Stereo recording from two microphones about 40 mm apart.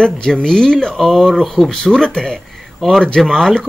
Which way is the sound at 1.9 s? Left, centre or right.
Centre.